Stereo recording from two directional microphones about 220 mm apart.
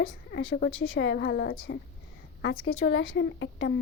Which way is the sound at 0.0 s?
50° left (ahead or behind).